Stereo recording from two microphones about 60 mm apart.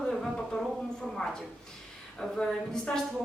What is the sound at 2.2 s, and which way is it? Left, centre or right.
Speech, centre.